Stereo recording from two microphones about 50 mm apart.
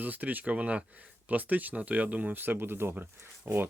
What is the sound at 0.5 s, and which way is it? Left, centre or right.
Speech, right.